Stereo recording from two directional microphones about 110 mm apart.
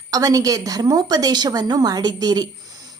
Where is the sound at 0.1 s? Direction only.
35° right (ahead or behind).